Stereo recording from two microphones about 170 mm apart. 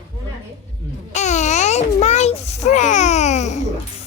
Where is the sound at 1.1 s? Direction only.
45° left (ahead or behind).